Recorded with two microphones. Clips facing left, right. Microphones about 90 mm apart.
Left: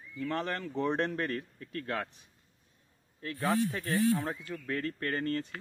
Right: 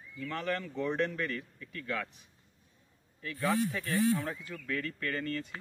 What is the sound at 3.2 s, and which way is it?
Speech, 35° left (ahead or behind).